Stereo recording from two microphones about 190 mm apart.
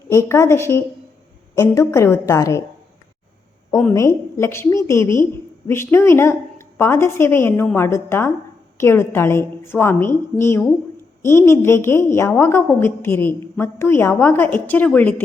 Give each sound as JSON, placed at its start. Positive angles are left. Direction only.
{"t": 0.1, "sound": "a woman's voice", "side_deg": 15}
{"t": 3.9, "sound": "a woman's voice", "side_deg": 15}